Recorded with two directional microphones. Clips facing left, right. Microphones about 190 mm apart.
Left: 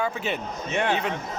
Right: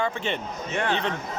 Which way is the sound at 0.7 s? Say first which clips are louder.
Left 1 dB; 20° left (ahead or behind).